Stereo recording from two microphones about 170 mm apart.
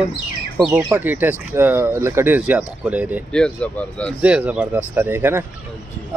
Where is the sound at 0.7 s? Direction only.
20° right (ahead or behind).